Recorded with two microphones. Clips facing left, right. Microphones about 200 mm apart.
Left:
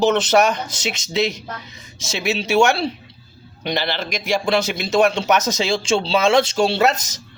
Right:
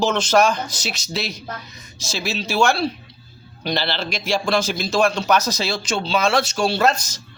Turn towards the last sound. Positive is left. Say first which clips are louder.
# left 1 dB
turn(degrees=20)  # may be behind; listen again after turning